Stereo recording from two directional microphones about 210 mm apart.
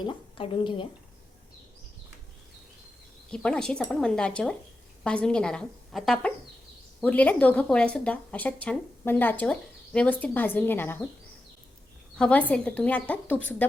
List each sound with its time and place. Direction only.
0.0 s a woman's voice: 25° left (ahead or behind)
3.2 s a woman's voice: 5° left (ahead or behind)
12.1 s a woman's voice: 5° left (ahead or behind)